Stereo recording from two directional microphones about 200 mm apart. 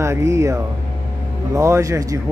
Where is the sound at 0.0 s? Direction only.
15° right (ahead or behind).